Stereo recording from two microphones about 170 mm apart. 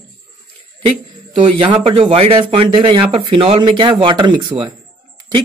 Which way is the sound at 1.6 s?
30° right (ahead or behind).